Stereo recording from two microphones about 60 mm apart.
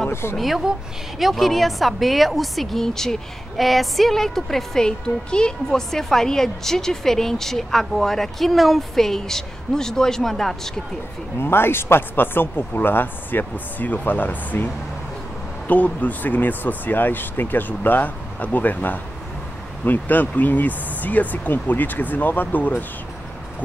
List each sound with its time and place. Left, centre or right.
0.1 s speech: left
0.4 s a woman's voice: centre
11.3 s speech: left
15.7 s speech: left